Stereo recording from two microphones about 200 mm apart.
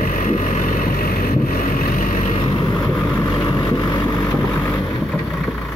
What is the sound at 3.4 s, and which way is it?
Vehicle, 25° left (ahead or behind).